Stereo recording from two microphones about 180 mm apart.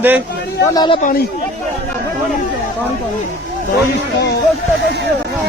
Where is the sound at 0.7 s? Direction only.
20° left (ahead or behind).